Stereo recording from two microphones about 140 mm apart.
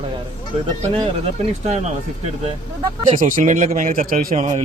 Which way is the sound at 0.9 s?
45° right (ahead or behind).